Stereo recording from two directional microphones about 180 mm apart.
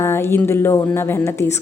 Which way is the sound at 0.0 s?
15° left (ahead or behind).